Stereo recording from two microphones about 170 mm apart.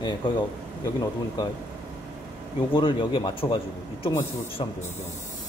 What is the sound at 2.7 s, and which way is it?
Speech, 30° left (ahead or behind).